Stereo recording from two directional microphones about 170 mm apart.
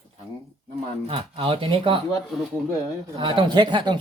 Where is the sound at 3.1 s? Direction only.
30° right (ahead or behind).